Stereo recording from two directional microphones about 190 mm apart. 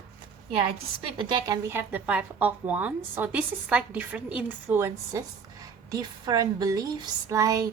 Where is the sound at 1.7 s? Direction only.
10° right (ahead or behind).